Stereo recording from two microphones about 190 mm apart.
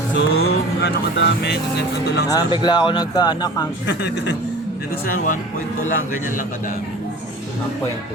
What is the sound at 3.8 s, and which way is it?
Speech, 65° left (ahead or behind).